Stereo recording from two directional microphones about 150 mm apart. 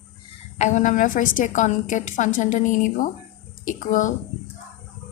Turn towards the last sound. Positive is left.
turn(degrees=65)  # may be behind; listen again after turning